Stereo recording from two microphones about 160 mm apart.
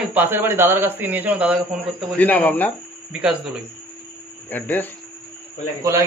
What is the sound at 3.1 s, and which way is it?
Speech, 5° right (ahead or behind).